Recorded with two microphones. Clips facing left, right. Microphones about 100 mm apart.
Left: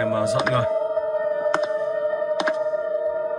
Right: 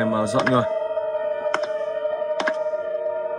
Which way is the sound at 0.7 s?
10° left (ahead or behind).